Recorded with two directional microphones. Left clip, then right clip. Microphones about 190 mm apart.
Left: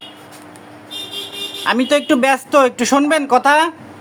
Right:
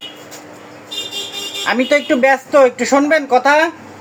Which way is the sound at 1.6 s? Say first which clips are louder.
Even; 30° left (ahead or behind).